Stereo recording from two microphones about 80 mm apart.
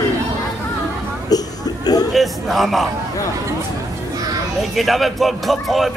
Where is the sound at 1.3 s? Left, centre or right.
Left.